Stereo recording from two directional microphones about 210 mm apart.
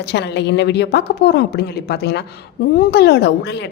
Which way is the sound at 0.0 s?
55° left (ahead or behind).